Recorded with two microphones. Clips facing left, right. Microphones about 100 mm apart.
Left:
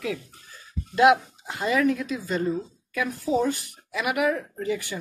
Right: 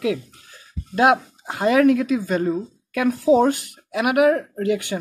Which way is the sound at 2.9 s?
70° right (ahead or behind).